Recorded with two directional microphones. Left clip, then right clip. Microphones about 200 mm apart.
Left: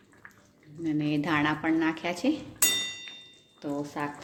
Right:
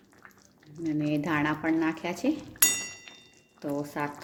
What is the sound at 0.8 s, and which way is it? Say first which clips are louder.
Speech: left 1 dB; 5° right (ahead or behind).